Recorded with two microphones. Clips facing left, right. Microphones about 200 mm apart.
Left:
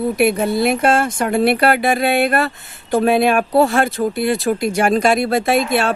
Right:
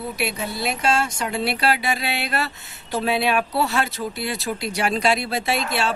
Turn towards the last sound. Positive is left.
turn(degrees=55)  # may be behind; listen again after turning